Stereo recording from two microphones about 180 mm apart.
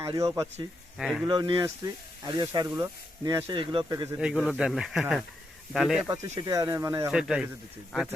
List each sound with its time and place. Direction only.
0.0 s speech: 20° right (ahead or behind)
0.9 s speech: centre (ahead or behind)
1.2 s speech: 25° right (ahead or behind)
4.2 s speech: 5° right (ahead or behind)
6.1 s speech: 15° right (ahead or behind)
7.1 s speech: 5° right (ahead or behind)